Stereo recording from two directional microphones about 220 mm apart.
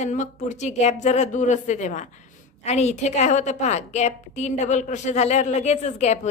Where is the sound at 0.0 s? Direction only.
35° left (ahead or behind).